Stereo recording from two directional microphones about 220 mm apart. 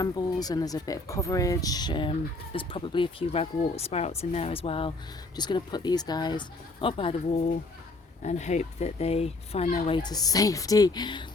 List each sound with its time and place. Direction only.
0.0 s speech: 15° left (ahead or behind)
8.2 s speech: 30° left (ahead or behind)